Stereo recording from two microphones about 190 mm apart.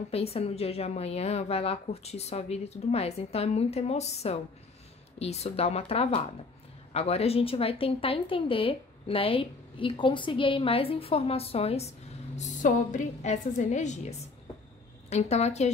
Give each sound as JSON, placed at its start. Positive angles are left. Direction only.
{"t": 0.1, "sound": "a woman's voice", "side_deg": 30}